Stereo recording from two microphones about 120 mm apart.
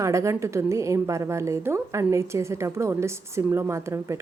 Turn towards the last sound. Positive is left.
turn(degrees=-25)  # may be behind; listen again after turning